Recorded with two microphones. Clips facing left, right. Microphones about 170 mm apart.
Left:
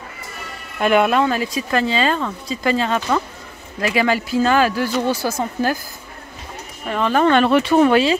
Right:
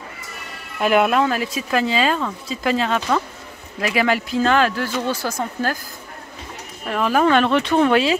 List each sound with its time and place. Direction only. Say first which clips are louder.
0.7 s speech: left 1 dB; centre (ahead or behind)
6.9 s speech: left 1 dB; 5° right (ahead or behind)